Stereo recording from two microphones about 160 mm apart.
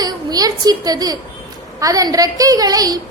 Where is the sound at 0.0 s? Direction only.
25° right (ahead or behind).